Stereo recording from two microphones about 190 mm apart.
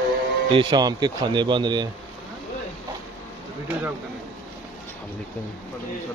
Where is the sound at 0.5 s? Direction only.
20° right (ahead or behind).